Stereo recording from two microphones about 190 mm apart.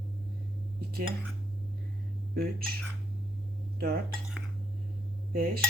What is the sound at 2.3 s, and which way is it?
Speech, 50° right (ahead or behind).